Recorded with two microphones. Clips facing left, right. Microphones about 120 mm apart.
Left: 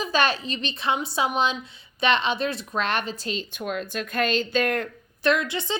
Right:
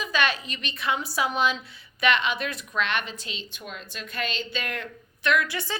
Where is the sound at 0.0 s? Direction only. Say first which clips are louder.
Left 3 dB; 35° left (ahead or behind).